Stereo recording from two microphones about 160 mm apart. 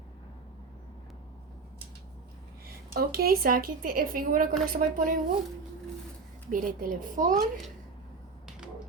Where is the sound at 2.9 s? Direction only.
70° right (ahead or behind).